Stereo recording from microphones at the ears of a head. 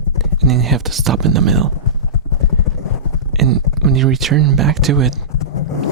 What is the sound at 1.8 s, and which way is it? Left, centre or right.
Clip-clop, left.